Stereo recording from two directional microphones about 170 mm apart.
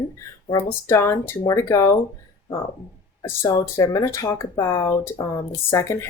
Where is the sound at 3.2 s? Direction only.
15° left (ahead or behind).